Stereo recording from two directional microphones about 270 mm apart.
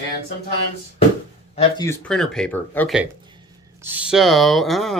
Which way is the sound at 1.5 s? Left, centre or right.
Centre.